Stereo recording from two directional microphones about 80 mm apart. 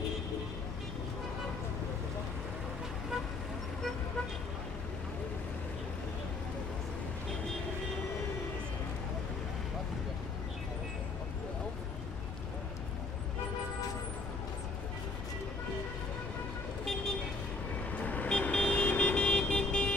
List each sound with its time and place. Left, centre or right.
17.9 s vehicle: centre